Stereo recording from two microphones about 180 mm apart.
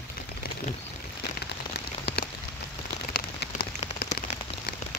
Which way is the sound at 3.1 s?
55° left (ahead or behind).